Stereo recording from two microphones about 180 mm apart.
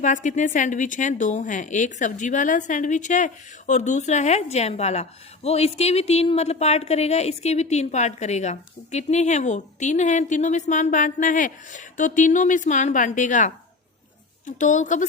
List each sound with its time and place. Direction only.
0.0 s a woman's voice: 45° left (ahead or behind)